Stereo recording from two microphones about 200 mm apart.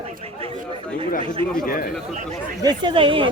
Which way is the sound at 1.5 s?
45° left (ahead or behind).